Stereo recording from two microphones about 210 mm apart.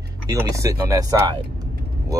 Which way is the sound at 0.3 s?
15° right (ahead or behind).